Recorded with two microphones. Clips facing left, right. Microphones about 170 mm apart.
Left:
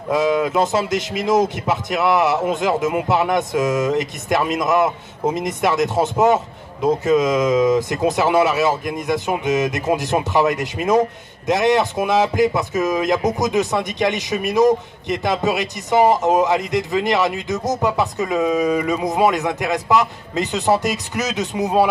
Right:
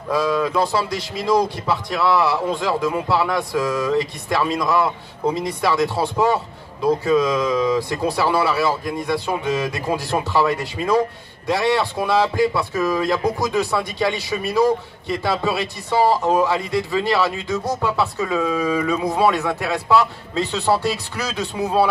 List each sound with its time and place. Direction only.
0.1 s speech: 20° left (ahead or behind)